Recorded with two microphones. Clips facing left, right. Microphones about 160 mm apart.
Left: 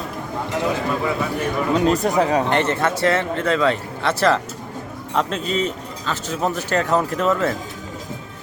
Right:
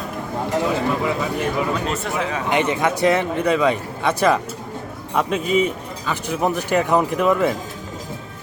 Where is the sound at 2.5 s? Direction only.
10° right (ahead or behind).